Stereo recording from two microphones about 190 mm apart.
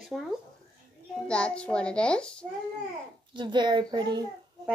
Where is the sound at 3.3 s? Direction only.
25° right (ahead or behind).